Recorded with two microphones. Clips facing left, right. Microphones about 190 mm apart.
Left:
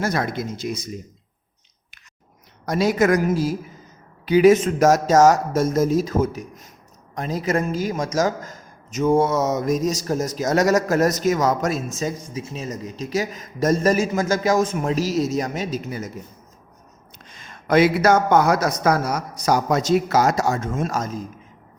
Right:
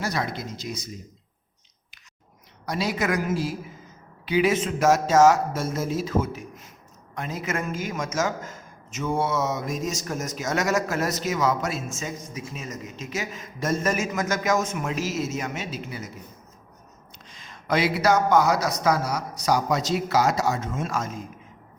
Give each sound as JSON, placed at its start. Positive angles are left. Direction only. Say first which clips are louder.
{"t": 0.0, "sound": "a man's voice", "louder": "left 5 dB", "side_deg": 50}
{"t": 2.6, "sound": "a man's voice", "louder": "left 8 dB", "side_deg": 45}
{"t": 17.2, "sound": "a man's voice", "louder": "left 4 dB", "side_deg": 50}